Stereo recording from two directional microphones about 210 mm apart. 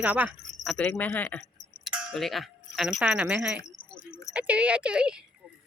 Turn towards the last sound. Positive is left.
turn(degrees=-5)  # may be behind; listen again after turning